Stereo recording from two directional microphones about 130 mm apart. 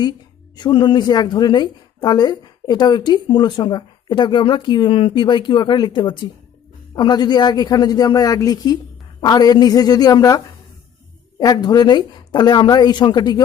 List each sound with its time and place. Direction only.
0.5 s a woman's voice: 35° left (ahead or behind)